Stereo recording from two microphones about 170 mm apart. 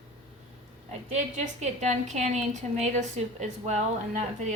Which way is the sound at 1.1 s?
45° right (ahead or behind).